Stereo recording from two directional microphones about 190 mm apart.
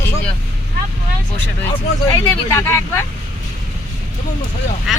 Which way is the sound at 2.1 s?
15° left (ahead or behind).